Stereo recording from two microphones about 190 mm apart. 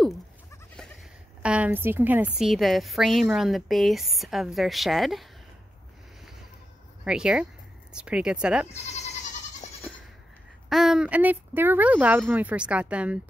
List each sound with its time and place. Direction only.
1.4 s a woman's voice: 5° right (ahead or behind)
7.1 s a woman's voice: 5° right (ahead or behind)
8.6 s goat: 35° left (ahead or behind)
10.7 s speech: centre (ahead or behind)